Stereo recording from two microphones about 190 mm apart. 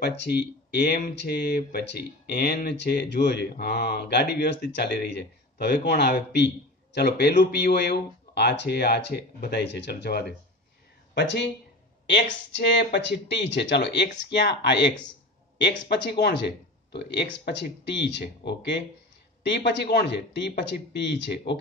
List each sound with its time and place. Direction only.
0.0 s speech: 60° left (ahead or behind)